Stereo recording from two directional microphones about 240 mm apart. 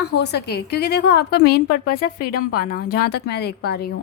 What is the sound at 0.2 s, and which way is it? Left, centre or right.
A woman's voice, left.